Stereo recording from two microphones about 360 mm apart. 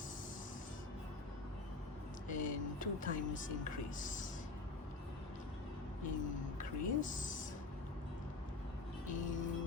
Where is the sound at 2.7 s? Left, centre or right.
Left.